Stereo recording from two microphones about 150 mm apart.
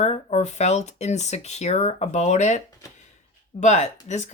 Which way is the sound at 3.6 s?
50° left (ahead or behind).